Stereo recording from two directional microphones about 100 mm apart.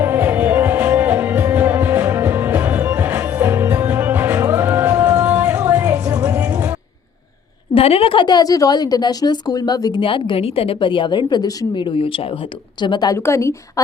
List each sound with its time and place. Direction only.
0.0 s music: 20° right (ahead or behind)
7.7 s a woman's voice: 75° left (ahead or behind); by 10.0 s 40° left (ahead or behind)
10.0 s a woman's voice: 60° left (ahead or behind)
13.1 s speech: 30° left (ahead or behind)